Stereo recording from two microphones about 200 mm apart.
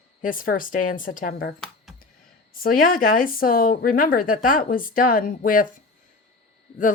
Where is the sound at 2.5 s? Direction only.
45° left (ahead or behind).